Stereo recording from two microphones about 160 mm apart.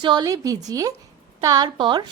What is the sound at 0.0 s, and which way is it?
A woman's voice, 30° right (ahead or behind).